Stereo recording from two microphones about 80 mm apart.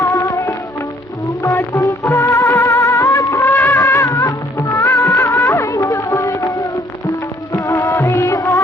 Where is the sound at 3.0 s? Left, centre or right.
Left.